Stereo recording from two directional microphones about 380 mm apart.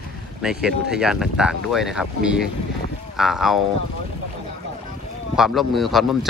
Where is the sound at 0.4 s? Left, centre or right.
Centre.